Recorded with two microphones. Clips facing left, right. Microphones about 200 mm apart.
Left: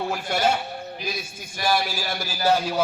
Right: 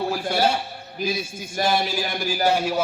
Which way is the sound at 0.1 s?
35° right (ahead or behind).